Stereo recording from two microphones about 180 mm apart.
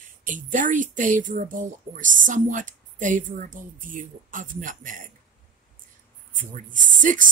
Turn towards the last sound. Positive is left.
turn(degrees=-45)  # may be behind; listen again after turning